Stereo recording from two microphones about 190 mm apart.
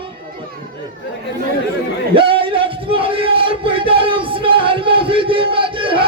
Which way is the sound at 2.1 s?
30° right (ahead or behind).